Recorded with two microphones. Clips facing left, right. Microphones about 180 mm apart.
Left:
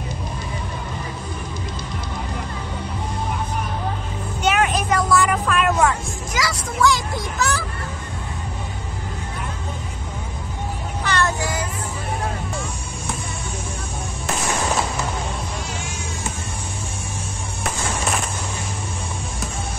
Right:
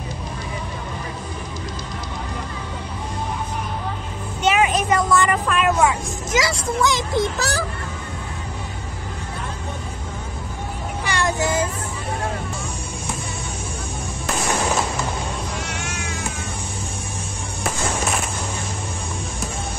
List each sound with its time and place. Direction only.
4.4 s vehicle: centre (ahead or behind)
6.3 s speech: 25° right (ahead or behind)
7.3 s a child's voice: 35° right (ahead or behind)
11.1 s child singing: 15° right (ahead or behind)
15.6 s music: 75° right (ahead or behind)